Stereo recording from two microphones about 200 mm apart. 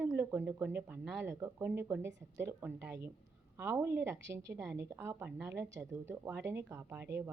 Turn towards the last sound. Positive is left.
turn(degrees=-10)  # may be behind; listen again after turning